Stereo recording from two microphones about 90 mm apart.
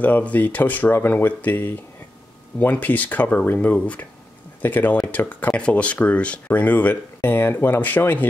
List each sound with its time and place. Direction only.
0.0 s speech: 15° left (ahead or behind)